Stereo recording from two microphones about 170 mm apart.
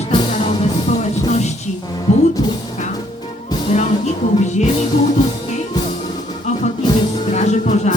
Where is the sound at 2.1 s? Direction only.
40° left (ahead or behind).